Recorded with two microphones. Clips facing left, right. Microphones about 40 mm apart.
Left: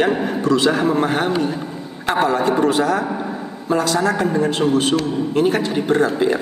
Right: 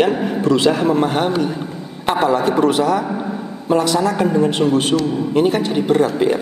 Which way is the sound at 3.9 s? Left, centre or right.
Left.